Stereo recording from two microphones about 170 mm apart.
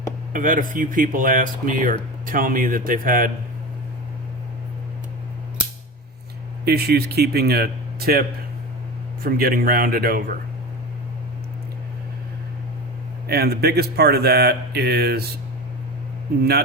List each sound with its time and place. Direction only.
0.3 s a man's voice: 50° right (ahead or behind)
6.7 s speech: 70° right (ahead or behind)
9.2 s a man's voice: 60° right (ahead or behind)
13.2 s speech: 65° right (ahead or behind)